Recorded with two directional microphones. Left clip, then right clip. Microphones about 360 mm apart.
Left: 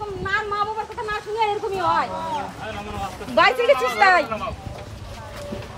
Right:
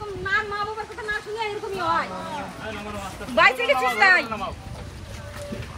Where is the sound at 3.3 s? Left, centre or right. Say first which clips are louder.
Left 2 dB; left.